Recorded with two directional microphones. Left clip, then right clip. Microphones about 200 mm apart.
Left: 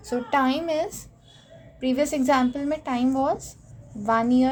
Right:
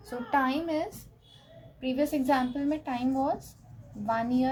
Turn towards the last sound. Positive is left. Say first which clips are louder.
# left 7 dB
turn(degrees=45)  # may be behind; listen again after turning